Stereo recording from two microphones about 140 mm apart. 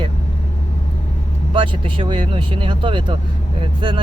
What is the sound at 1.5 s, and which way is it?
Speech, 35° right (ahead or behind).